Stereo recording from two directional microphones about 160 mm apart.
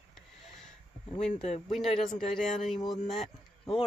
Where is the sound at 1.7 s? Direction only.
Centre (ahead or behind).